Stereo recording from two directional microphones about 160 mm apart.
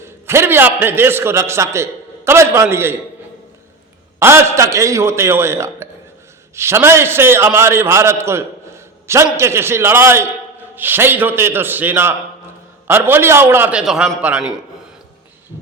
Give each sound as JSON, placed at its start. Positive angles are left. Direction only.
{"t": 0.0, "sound": "a man's voice", "side_deg": -15}
{"t": 4.2, "sound": "a man's voice", "side_deg": -15}